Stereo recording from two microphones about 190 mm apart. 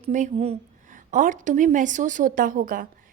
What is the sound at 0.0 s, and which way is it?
A woman's voice, 40° right (ahead or behind).